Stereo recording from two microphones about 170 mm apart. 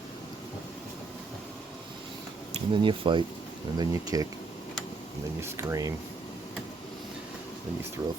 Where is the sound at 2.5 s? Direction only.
30° right (ahead or behind).